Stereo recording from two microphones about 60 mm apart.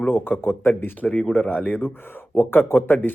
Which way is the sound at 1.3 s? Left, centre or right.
Left.